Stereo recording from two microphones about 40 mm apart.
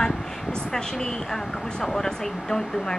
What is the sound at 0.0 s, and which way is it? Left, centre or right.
Speech, centre.